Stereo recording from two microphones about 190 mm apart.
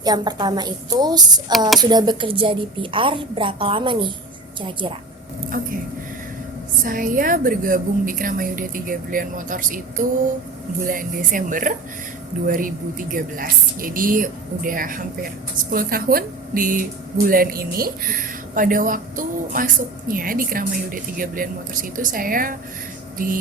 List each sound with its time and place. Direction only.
0.0 s a woman's voice: 20° right (ahead or behind)
5.5 s speech: 45° right (ahead or behind)
6.8 s speech: 45° right (ahead or behind)
23.1 s a sound: 45° right (ahead or behind)